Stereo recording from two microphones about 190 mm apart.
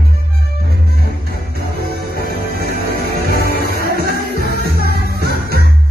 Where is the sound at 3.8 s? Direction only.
55° right (ahead or behind).